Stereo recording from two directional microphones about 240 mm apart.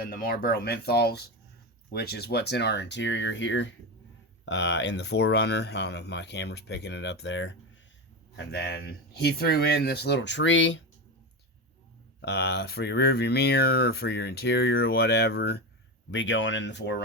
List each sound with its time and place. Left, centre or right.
0.1 s speech: left
12.2 s speech: left